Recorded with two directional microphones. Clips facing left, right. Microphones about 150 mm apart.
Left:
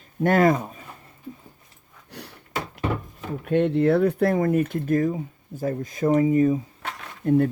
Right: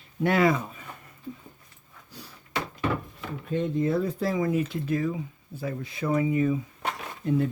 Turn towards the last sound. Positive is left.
turn(degrees=55)  # may be behind; listen again after turning